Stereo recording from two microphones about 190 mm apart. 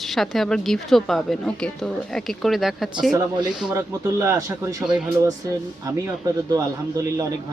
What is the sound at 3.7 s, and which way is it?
Speech, 15° right (ahead or behind).